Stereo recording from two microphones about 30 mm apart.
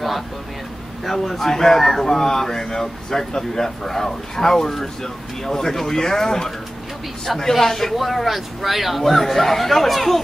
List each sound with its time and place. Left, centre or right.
1.0 s speech: centre